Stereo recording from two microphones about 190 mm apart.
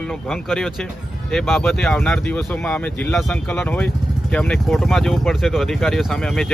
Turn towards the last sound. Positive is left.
turn(degrees=5)  # may be behind; listen again after turning